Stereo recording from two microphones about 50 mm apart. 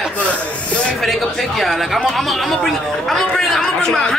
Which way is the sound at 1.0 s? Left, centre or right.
Centre.